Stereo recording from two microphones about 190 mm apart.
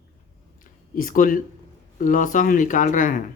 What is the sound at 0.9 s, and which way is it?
Speech, 45° left (ahead or behind).